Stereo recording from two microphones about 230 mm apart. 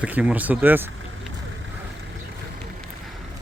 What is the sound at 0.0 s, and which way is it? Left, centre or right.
Speech, centre.